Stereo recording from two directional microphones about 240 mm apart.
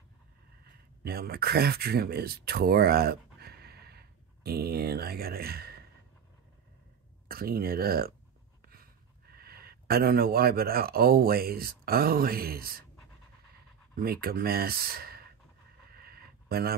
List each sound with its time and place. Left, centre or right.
1.0 s speech: right
7.2 s speech: right
13.9 s speech: right
15.9 s a sound: right